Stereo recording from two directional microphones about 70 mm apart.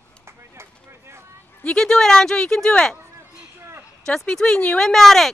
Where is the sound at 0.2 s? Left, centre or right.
Right.